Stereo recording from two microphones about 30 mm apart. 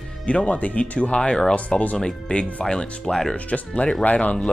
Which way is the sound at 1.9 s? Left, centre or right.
Left.